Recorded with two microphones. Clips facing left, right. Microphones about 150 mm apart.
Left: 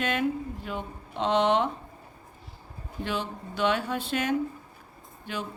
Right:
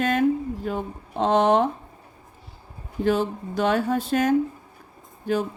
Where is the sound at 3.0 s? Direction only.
45° right (ahead or behind).